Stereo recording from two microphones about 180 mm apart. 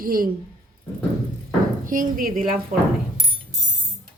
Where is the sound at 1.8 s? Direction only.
50° right (ahead or behind).